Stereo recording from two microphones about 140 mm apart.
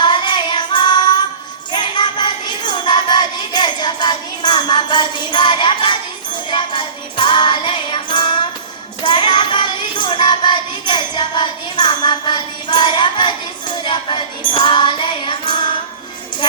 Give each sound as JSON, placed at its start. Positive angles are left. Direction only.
{"t": 0.0, "sound": "child singing", "side_deg": 35}